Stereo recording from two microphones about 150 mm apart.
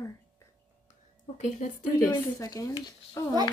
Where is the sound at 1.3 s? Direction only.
55° left (ahead or behind).